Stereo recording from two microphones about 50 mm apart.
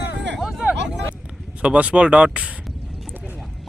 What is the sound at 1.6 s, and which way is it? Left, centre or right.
Speech, right.